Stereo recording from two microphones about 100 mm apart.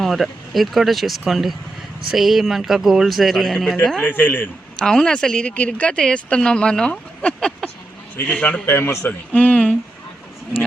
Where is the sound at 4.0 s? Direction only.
20° left (ahead or behind).